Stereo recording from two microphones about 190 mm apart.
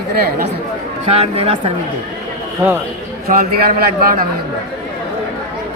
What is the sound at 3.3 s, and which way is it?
A man's voice, 55° right (ahead or behind).